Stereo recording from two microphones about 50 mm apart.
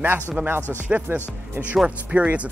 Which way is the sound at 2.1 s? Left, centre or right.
Right.